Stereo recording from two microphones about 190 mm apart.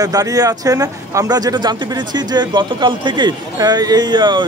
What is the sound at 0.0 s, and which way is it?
Speech, 20° right (ahead or behind).